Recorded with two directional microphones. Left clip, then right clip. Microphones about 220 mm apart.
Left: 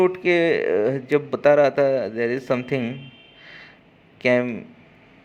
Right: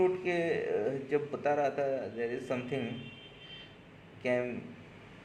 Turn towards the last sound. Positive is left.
turn(degrees=45)  # may be behind; listen again after turning